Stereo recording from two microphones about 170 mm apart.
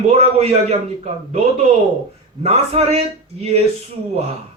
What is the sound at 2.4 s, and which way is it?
Speech, 40° right (ahead or behind).